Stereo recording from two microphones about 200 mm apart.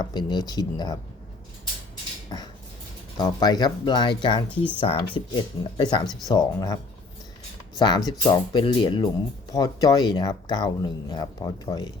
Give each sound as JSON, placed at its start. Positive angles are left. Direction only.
{"t": 0.0, "sound": "speech", "side_deg": 20}
{"t": 2.3, "sound": "dishes", "side_deg": 20}
{"t": 3.2, "sound": "speech", "side_deg": 20}
{"t": 7.8, "sound": "speech", "side_deg": 20}